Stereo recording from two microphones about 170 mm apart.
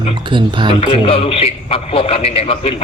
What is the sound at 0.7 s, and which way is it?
A man's voice, 35° left (ahead or behind).